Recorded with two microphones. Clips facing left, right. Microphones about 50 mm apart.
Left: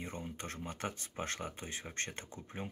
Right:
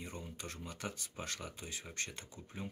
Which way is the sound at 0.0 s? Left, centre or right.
Left.